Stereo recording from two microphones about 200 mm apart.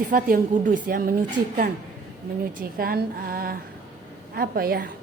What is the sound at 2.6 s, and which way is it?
A woman's voice, 45° right (ahead or behind).